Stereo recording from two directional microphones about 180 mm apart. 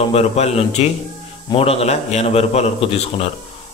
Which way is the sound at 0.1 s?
35° left (ahead or behind).